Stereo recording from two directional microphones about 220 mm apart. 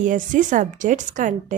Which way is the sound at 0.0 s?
35° right (ahead or behind).